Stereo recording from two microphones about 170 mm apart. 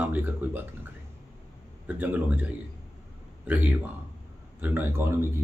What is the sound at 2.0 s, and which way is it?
Speech, 10° right (ahead or behind).